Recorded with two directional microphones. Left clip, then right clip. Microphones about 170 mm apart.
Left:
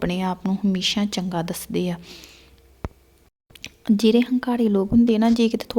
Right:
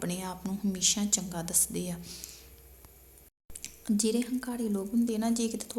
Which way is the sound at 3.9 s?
45° left (ahead or behind).